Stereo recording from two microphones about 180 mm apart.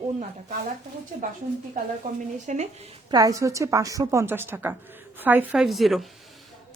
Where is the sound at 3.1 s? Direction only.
20° right (ahead or behind); by 6.1 s centre (ahead or behind).